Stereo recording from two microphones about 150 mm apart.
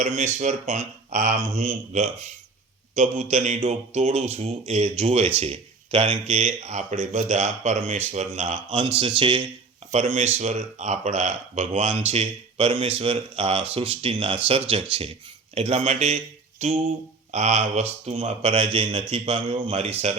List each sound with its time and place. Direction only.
0.0 s a man's voice: 50° right (ahead or behind)
9.0 s speech: 35° right (ahead or behind)
10.2 s a man's voice: 50° right (ahead or behind)